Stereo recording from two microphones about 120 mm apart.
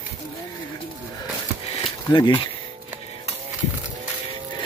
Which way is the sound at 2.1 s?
40° left (ahead or behind).